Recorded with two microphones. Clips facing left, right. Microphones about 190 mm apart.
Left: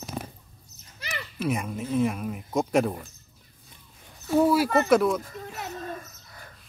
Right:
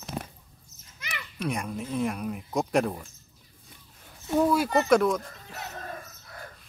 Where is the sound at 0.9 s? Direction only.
35° left (ahead or behind).